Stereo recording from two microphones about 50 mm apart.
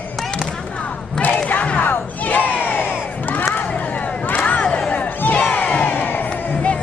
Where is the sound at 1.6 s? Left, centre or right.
Left.